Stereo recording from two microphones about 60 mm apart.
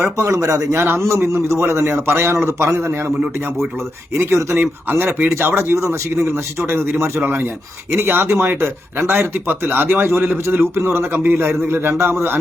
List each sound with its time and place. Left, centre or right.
0.3 s speech: right
0.7 s a man's voice: right
4.5 s speech: right
5.7 s a man's voice: right
6.7 s speech: right